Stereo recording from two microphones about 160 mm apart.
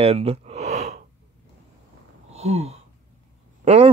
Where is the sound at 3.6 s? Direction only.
40° right (ahead or behind).